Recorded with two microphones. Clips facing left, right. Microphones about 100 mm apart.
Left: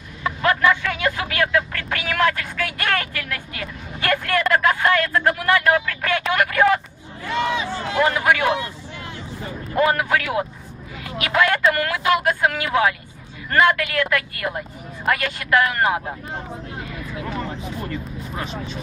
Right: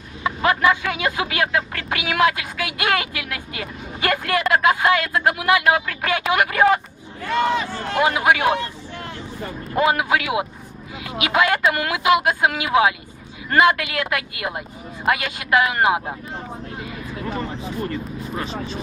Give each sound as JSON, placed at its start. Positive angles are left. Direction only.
{"t": 0.2, "sound": "speech", "side_deg": -15}
{"t": 7.3, "sound": "speech", "side_deg": -50}
{"t": 8.0, "sound": "speech", "side_deg": -20}
{"t": 8.5, "sound": "vehicle", "side_deg": -50}
{"t": 9.7, "sound": "speech", "side_deg": -15}
{"t": 17.3, "sound": "speech", "side_deg": 0}